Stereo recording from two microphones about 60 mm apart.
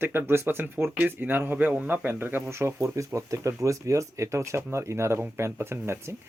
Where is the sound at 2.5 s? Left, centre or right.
Right.